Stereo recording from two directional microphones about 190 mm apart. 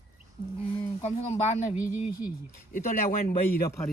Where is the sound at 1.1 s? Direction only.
35° left (ahead or behind).